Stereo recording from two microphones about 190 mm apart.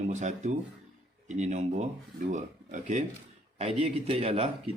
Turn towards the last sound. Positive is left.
turn(degrees=-30)  # may be behind; listen again after turning